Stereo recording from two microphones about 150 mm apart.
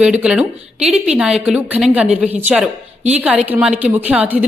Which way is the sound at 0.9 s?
45° right (ahead or behind).